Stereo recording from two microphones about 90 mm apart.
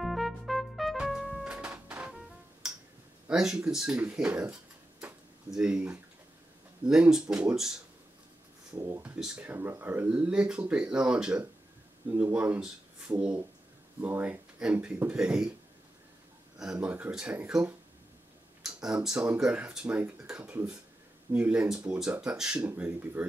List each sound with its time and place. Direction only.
0.0 s trumpet: centre (ahead or behind)
1.4 s music: 10° right (ahead or behind)
3.3 s speech: 5° right (ahead or behind)
6.9 s speech: 10° right (ahead or behind)
8.7 s speech: 35° right (ahead or behind)
9.2 s speech: 10° right (ahead or behind)
9.5 s speech: 25° right (ahead or behind)
10.0 s speech: 15° right (ahead or behind)
12.1 s speech: 20° right (ahead or behind)
14.0 s speech: 25° right (ahead or behind)
14.6 s speech: 15° right (ahead or behind)
16.7 s speech: 20° right (ahead or behind)
22.7 s speech: 20° right (ahead or behind)